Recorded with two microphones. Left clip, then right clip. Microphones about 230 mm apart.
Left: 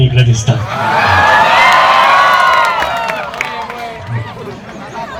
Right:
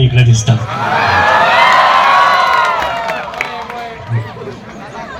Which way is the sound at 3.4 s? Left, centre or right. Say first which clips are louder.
Left 2 dB; centre.